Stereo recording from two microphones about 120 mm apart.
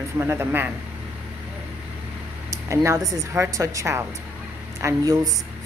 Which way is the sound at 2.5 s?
25° right (ahead or behind).